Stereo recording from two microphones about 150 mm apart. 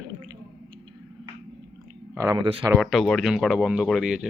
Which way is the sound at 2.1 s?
20° right (ahead or behind).